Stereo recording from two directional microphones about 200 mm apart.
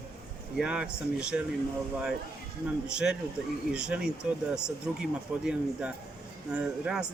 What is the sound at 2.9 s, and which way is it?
Speech, 5° right (ahead or behind).